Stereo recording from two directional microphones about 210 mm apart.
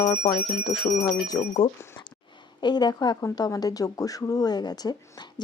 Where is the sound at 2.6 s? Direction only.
20° left (ahead or behind).